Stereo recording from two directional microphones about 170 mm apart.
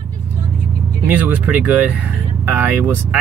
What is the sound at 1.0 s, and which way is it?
Speech, 10° right (ahead or behind).